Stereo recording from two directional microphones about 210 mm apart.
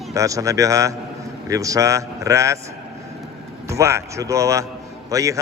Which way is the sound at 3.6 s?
15° right (ahead or behind).